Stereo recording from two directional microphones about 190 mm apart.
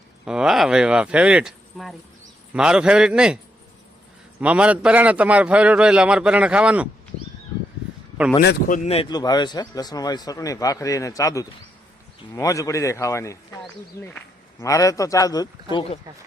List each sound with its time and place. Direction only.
0.3 s speech: 5° right (ahead or behind)
4.4 s a man's voice: 5° right (ahead or behind)
8.4 s a man's voice: 50° left (ahead or behind); by 15.4 s 20° left (ahead or behind)
15.7 s speech: 30° left (ahead or behind)